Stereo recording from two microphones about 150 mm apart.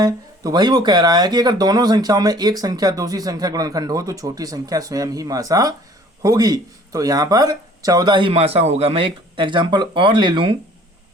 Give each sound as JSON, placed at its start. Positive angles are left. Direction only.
{"t": 0.0, "sound": "speech", "side_deg": -25}
{"t": 8.3, "sound": "speech", "side_deg": -40}